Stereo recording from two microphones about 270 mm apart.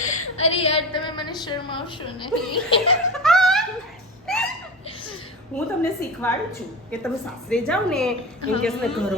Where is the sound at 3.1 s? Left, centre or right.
Centre.